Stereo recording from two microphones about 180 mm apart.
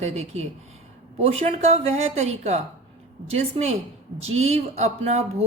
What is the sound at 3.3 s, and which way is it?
Speech, 35° right (ahead or behind).